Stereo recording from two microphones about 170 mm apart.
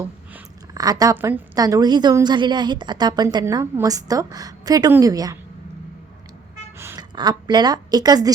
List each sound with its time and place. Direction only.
0.7 s a woman's voice: 20° right (ahead or behind)
6.7 s a sound: 15° right (ahead or behind)
7.2 s a woman's voice: 25° right (ahead or behind)